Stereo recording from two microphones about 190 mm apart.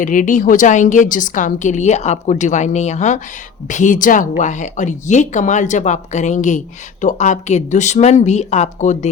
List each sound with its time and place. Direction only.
0.0 s a woman's voice: 45° left (ahead or behind)